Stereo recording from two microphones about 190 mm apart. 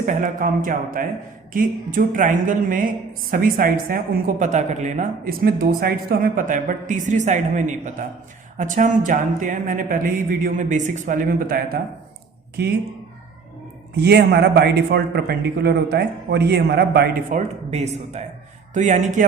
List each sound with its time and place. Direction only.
0.0 s a woman's voice: 40° right (ahead or behind)
13.9 s a man's voice: 60° right (ahead or behind)
17.3 s speech: 35° right (ahead or behind)